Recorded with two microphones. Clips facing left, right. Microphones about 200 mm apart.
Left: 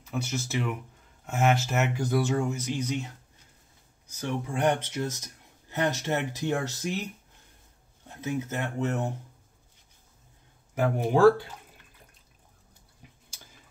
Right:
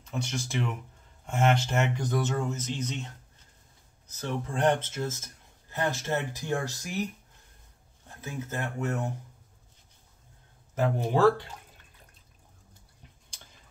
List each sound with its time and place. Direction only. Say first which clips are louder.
0.0 s speech: left 2 dB; 5° left (ahead or behind)
4.1 s speech: left 2 dB; 10° left (ahead or behind)
8.2 s speech: left 4 dB; 20° left (ahead or behind)
10.7 s speech: left 2 dB; 10° left (ahead or behind)